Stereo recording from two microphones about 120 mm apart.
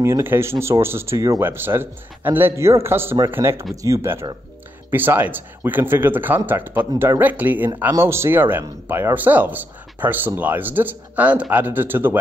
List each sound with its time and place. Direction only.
0.0 s a man's voice: 20° right (ahead or behind)
1.4 s a man's voice: 20° right (ahead or behind)